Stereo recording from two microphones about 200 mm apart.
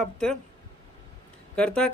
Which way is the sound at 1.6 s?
5° left (ahead or behind).